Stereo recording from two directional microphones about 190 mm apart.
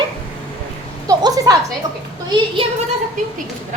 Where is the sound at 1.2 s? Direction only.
20° right (ahead or behind).